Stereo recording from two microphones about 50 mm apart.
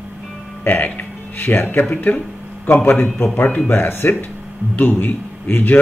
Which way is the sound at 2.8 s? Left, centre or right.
Left.